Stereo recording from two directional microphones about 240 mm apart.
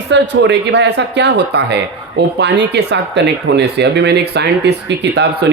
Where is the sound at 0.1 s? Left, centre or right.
Right.